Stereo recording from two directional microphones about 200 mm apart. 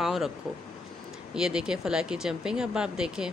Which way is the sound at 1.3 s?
5° right (ahead or behind).